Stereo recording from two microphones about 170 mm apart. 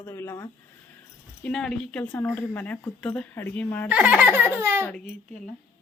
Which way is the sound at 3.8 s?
10° right (ahead or behind).